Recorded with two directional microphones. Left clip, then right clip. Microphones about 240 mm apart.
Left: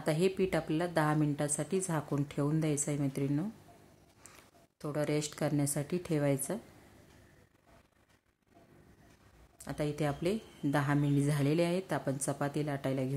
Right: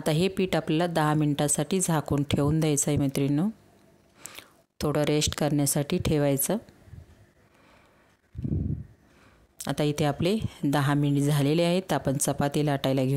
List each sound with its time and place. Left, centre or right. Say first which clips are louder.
0.0 s a woman's voice: right 4 dB; right
9.6 s speech: right 8 dB; right